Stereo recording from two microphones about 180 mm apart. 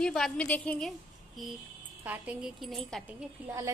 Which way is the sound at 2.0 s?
10° right (ahead or behind).